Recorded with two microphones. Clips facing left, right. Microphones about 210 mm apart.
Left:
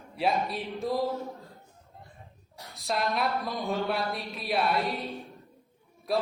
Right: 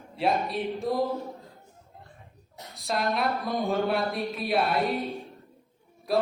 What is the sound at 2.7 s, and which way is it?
Music, centre (ahead or behind).